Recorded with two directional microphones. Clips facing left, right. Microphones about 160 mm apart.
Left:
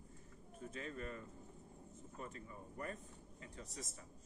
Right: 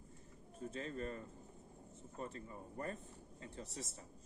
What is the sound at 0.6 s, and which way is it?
A man's voice, 35° right (ahead or behind).